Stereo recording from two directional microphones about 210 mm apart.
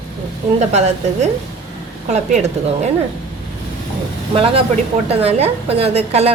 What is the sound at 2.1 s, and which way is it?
Speech, 35° right (ahead or behind).